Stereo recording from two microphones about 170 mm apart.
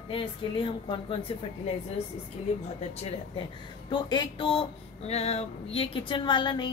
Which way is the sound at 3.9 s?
25° left (ahead or behind).